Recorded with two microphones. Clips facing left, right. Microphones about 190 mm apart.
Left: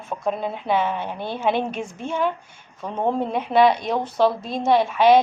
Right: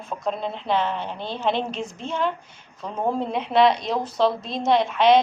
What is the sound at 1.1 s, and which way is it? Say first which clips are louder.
Speech: left 2 dB; 55° left (ahead or behind).